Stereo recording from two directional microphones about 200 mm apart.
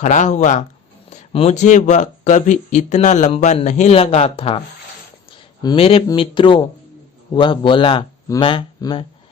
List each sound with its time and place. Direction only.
0.0 s speech: 35° left (ahead or behind)
5.6 s speech: 30° left (ahead or behind)